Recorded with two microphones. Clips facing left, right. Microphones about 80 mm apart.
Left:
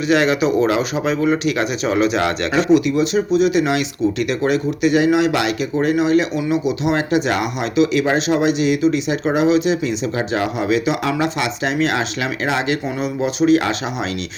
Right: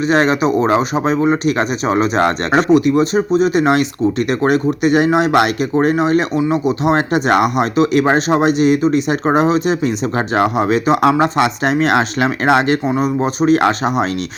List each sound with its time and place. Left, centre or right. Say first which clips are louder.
0.1 s speech: right 1 dB; right